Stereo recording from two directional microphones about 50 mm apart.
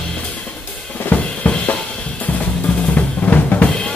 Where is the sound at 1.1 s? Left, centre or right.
Left.